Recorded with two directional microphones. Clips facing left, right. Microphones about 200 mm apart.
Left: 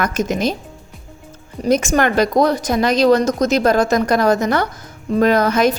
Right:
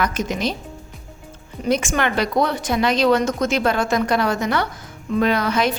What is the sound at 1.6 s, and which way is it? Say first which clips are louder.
A woman's voice: left 5 dB; 40° left (ahead or behind).